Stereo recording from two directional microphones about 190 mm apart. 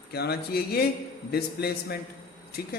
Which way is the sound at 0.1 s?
55° left (ahead or behind).